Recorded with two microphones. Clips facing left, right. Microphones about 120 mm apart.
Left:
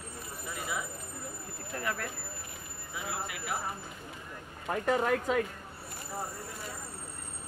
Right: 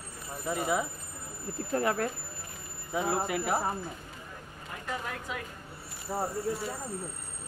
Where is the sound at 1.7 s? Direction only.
35° right (ahead or behind).